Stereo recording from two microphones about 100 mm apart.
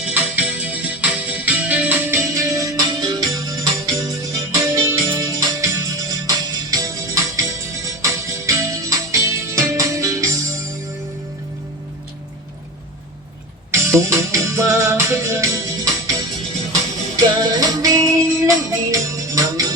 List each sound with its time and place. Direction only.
0.0 s music: 15° right (ahead or behind)
2.3 s music: 35° right (ahead or behind)
4.6 s music: 25° right (ahead or behind)
5.0 s music: 40° right (ahead or behind)
13.7 s music: 30° right (ahead or behind)
17.5 s music: 35° right (ahead or behind)